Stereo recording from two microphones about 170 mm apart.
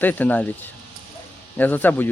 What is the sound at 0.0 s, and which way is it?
Speech, 10° left (ahead or behind).